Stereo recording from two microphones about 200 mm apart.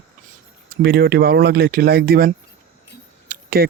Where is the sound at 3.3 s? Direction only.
50° right (ahead or behind).